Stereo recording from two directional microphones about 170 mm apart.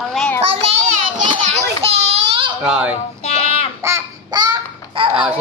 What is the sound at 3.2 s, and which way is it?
Child singing, 35° left (ahead or behind).